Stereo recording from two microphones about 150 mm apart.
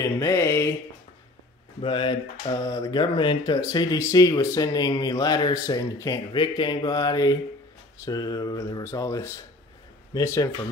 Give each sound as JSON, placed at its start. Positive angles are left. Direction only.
{"t": 0.0, "sound": "speech", "side_deg": 20}
{"t": 1.8, "sound": "speech", "side_deg": 35}